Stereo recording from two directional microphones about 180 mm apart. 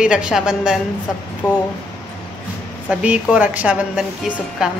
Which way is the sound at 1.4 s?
20° left (ahead or behind).